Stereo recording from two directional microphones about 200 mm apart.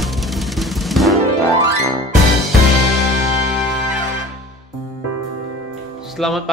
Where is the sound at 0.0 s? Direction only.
Centre (ahead or behind).